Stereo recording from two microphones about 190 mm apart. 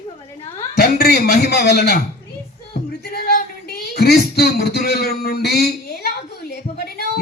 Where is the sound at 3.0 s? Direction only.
55° left (ahead or behind).